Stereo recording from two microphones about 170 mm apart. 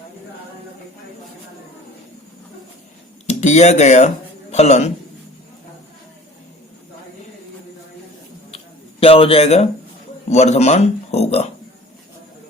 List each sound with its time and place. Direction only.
3.2 s speech: 40° left (ahead or behind)
8.4 s a sound: 35° left (ahead or behind)
10.2 s speech: 40° left (ahead or behind)